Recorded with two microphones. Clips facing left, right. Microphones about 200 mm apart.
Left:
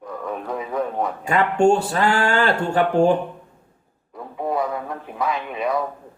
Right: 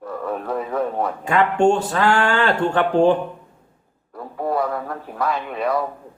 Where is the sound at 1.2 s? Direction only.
10° left (ahead or behind).